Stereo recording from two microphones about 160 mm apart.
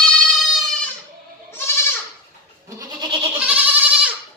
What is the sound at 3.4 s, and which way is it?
Goat, 10° right (ahead or behind).